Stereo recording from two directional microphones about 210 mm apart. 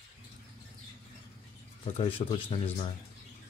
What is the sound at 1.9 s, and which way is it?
Speech, 25° left (ahead or behind).